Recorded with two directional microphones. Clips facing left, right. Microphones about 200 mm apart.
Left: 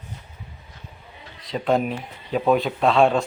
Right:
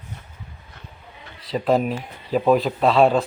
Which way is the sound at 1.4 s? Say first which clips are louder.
Right 2 dB; centre (ahead or behind).